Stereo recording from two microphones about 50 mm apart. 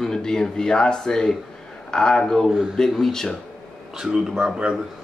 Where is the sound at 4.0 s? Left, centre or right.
Centre.